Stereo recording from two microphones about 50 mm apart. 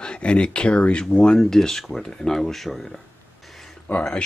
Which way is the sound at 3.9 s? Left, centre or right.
Left.